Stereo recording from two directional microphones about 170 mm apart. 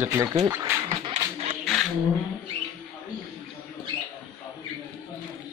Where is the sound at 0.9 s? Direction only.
35° right (ahead or behind).